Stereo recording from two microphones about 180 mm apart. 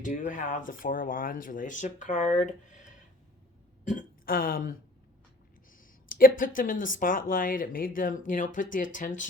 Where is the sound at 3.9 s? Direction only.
50° left (ahead or behind).